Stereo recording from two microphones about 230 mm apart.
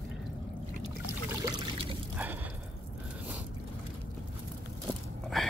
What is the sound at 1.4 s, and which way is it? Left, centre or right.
Trickle, centre.